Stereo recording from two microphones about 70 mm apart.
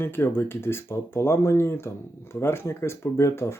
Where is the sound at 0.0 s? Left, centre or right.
Left.